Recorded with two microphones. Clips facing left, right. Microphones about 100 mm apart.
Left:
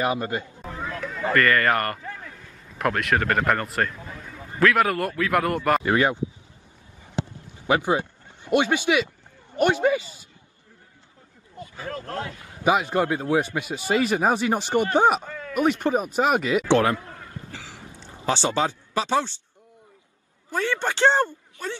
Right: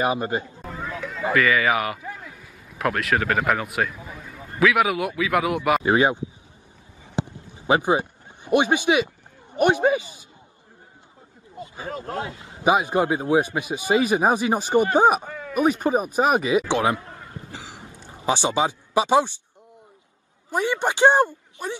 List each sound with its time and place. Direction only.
0.1 s speech: 25° right (ahead or behind)
0.6 s speech: centre (ahead or behind)
5.9 s speech: 20° right (ahead or behind)
7.2 s a sound: 20° right (ahead or behind)
9.6 s speech: 20° right (ahead or behind)
11.5 s a man's voice: 20° right (ahead or behind)
20.5 s speech: 15° right (ahead or behind)